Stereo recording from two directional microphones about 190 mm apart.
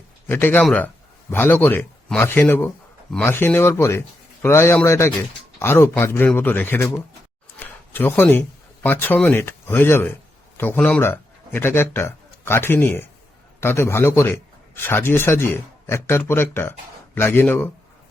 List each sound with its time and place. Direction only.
0.3 s speech: 10° left (ahead or behind)